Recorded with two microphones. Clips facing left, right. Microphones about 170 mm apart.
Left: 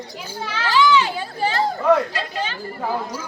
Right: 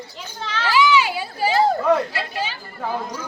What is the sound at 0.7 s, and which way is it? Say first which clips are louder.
Speech: even; 10° right (ahead or behind).